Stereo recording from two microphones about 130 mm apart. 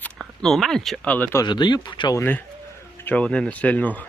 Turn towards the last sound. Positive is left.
turn(degrees=10)  # may be behind; listen again after turning